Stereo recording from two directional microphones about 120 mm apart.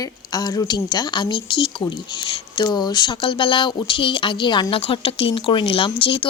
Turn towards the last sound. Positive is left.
turn(degrees=45)  # may be behind; listen again after turning